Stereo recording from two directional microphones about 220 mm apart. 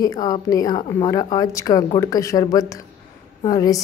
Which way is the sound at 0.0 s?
15° left (ahead or behind).